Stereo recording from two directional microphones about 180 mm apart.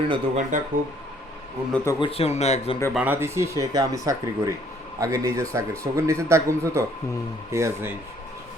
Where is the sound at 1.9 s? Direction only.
30° left (ahead or behind).